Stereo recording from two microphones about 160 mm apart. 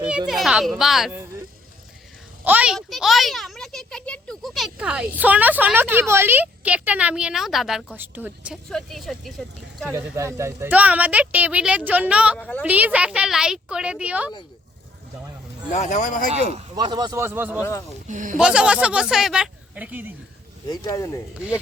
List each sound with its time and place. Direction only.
0.0 s a woman's voice: 5° right (ahead or behind)
2.4 s a child's voice: 10° right (ahead or behind)
7.9 s a child's voice: 10° right (ahead or behind)
8.7 s a woman's voice: centre (ahead or behind)
9.9 s a child's voice: 20° right (ahead or behind)
12.4 s a woman's voice: 10° left (ahead or behind)
12.6 s a child's voice: 10° right (ahead or behind)
15.7 s speech: 50° left (ahead or behind)
16.3 s speech: 40° right (ahead or behind)
16.7 s speech: 30° right (ahead or behind)
17.6 s speech: 20° left (ahead or behind)
18.1 s speech: 55° right (ahead or behind)
18.3 s a child's voice: 5° right (ahead or behind)
20.7 s speech: 20° left (ahead or behind)